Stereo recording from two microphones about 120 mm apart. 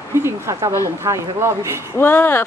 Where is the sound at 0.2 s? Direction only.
25° right (ahead or behind).